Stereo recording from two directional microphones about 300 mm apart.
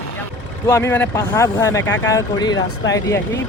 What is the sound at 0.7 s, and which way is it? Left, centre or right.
Speech, centre.